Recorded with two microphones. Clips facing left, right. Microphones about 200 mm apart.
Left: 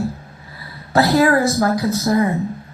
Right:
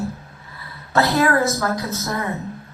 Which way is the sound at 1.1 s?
35° left (ahead or behind).